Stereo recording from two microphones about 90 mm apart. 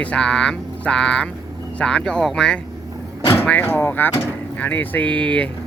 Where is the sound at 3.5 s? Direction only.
20° left (ahead or behind).